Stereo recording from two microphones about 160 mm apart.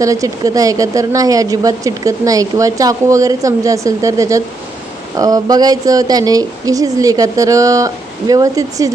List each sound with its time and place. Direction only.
0.0 s speech: 20° right (ahead or behind)